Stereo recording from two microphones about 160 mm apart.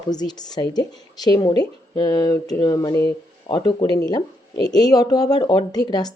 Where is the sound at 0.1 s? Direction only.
25° left (ahead or behind).